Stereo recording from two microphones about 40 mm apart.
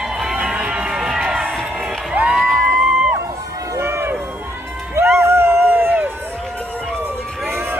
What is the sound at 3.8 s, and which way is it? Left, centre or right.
Run, right.